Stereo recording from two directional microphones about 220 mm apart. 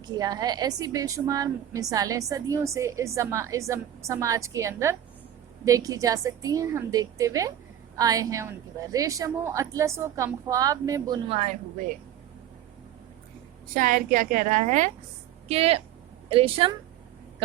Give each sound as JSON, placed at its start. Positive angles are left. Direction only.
{"t": 0.0, "sound": "a woman's voice", "side_deg": -15}
{"t": 13.7, "sound": "a woman's voice", "side_deg": -40}